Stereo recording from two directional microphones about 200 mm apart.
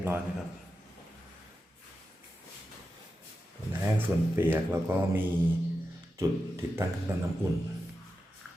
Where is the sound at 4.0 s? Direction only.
10° right (ahead or behind).